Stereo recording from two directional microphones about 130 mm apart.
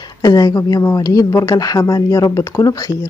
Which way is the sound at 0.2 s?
30° left (ahead or behind).